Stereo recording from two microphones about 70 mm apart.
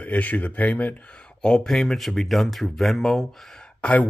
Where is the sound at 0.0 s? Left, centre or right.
Left.